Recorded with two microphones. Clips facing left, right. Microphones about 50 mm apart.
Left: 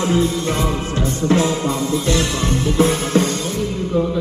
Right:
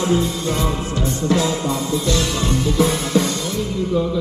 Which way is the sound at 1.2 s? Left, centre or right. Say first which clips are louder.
Left 2 dB; left.